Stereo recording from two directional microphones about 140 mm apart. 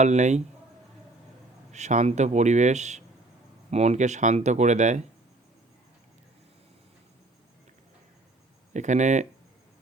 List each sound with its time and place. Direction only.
0.0 s speech: 55° right (ahead or behind)
1.7 s speech: 55° right (ahead or behind)
8.7 s speech: 60° right (ahead or behind)